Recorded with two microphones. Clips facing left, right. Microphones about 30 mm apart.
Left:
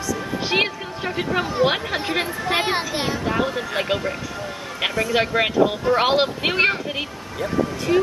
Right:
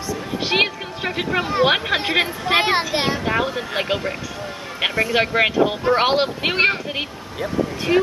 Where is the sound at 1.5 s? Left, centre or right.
Right.